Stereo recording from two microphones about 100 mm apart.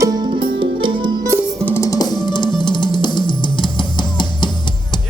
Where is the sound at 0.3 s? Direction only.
55° right (ahead or behind).